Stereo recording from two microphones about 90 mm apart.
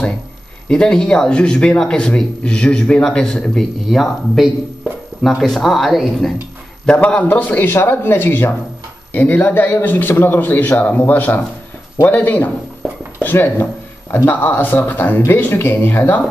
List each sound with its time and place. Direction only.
0.7 s a man's voice: 10° left (ahead or behind)
6.9 s a man's voice: 15° left (ahead or behind)
12.8 s a sound: 5° left (ahead or behind)
13.2 s a man's voice: 20° left (ahead or behind)